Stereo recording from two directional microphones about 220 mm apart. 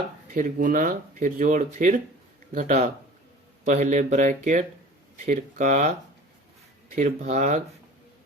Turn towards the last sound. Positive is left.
turn(degrees=-30)  # may be behind; listen again after turning